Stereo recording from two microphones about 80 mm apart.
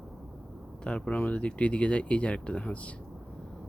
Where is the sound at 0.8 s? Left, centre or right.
Centre.